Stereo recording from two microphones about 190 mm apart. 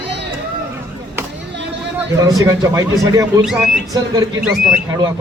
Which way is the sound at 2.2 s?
20° right (ahead or behind).